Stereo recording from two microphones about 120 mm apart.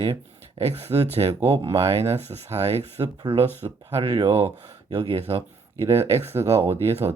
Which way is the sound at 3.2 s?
50° right (ahead or behind).